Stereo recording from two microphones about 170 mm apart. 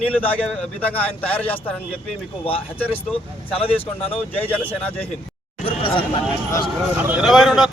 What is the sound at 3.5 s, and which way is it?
Speech, 35° left (ahead or behind).